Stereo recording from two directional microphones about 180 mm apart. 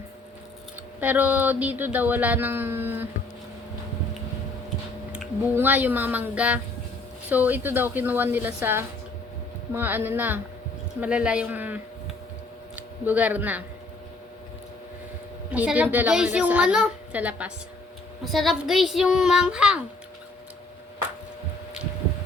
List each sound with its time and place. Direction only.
0.9 s speech: 10° right (ahead or behind)
5.1 s speech: 10° right (ahead or behind)
15.5 s a woman's voice: 10° right (ahead or behind)